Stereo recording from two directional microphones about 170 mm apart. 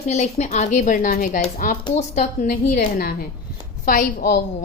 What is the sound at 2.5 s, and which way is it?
A woman's voice, 60° left (ahead or behind).